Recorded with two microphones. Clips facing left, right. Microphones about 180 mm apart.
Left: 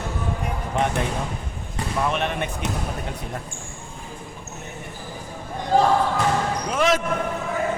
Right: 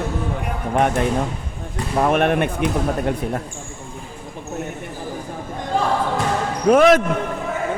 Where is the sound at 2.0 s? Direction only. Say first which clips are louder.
Right 8 dB; 55° right (ahead or behind).